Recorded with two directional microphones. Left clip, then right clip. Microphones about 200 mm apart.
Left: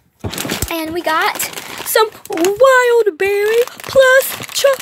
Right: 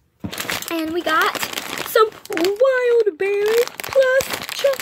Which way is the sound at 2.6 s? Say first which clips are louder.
Left 7 dB; centre (ahead or behind).